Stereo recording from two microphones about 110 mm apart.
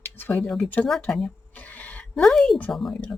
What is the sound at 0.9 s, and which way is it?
Speech, 5° left (ahead or behind).